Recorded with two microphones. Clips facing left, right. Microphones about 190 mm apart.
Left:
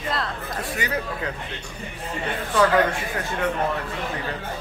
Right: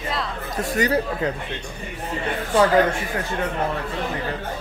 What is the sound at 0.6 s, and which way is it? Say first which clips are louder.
Speech: right 8 dB; 40° right (ahead or behind).